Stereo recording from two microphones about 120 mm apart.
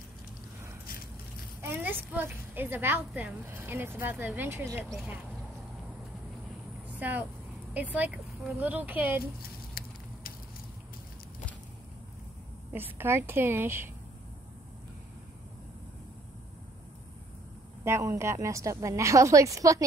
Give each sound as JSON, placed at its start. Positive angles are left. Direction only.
{"t": 1.6, "sound": "a woman's voice", "side_deg": -15}
{"t": 7.0, "sound": "a woman's voice", "side_deg": -15}
{"t": 12.7, "sound": "a woman's voice", "side_deg": -20}
{"t": 17.8, "sound": "a woman's voice", "side_deg": -25}